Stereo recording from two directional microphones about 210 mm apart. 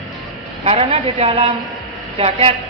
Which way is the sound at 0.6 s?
30° right (ahead or behind).